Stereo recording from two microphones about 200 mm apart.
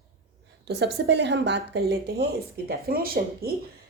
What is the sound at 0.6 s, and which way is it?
A woman's voice, 60° right (ahead or behind).